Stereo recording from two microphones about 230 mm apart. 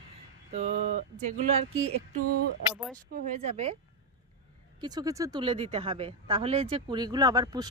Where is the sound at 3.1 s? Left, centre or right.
Right.